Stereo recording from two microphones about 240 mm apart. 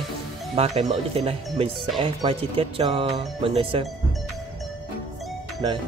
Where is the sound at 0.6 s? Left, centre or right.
Right.